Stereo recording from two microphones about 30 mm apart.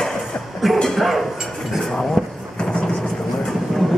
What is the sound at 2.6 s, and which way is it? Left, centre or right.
Vehicle, left.